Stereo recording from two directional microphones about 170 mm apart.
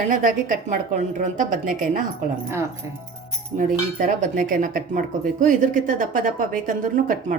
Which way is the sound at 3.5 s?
50° right (ahead or behind).